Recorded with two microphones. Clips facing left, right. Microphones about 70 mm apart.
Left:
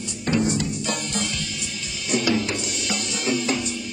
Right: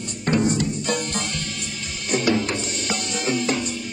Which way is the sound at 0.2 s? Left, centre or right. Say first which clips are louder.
Right 2 dB; right.